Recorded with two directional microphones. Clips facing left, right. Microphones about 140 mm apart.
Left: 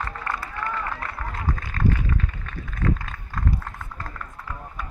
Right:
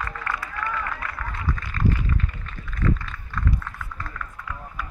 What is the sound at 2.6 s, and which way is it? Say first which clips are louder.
Run: even; 50° left (ahead or behind).